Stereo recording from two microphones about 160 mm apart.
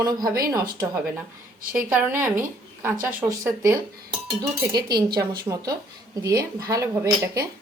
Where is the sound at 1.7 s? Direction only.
10° right (ahead or behind).